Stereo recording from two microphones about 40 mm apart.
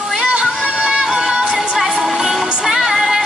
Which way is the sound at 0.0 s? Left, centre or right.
Centre.